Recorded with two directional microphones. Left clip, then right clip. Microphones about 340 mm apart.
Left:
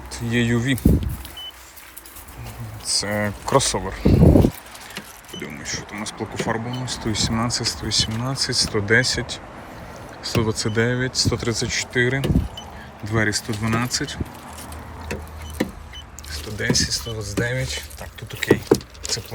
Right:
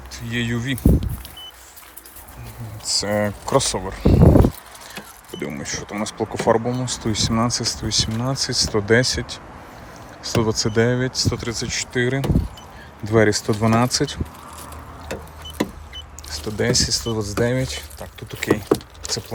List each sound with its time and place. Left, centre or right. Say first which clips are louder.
0.1 s speech: left 3 dB; centre
2.8 s speech: right 2 dB; centre
5.4 s speech: right 2 dB; centre
16.3 s speech: right 2 dB; centre
19.0 s vehicle: right 1 dB; centre